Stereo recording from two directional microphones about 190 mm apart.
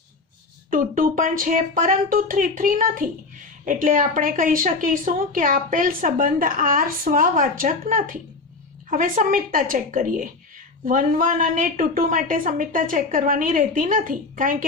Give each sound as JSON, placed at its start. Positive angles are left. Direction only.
{"t": 0.7, "sound": "a woman's voice", "side_deg": -45}